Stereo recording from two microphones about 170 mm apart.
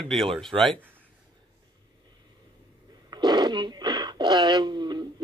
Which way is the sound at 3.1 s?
25° right (ahead or behind).